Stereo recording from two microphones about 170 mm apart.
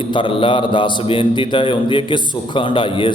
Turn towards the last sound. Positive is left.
turn(degrees=30)  # may be behind; listen again after turning